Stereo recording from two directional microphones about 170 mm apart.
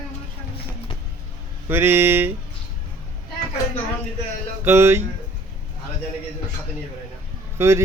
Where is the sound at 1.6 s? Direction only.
15° right (ahead or behind).